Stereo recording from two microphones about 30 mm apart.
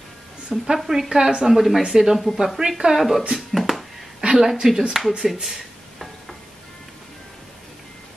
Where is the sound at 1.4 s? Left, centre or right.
Centre.